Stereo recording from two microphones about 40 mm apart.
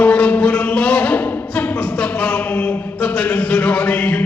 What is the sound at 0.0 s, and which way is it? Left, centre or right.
Music, left.